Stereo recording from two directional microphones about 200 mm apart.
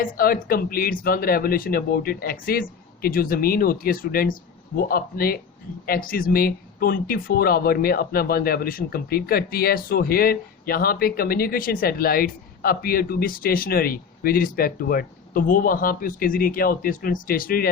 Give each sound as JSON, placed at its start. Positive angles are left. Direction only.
{"t": 0.0, "sound": "speech", "side_deg": 45}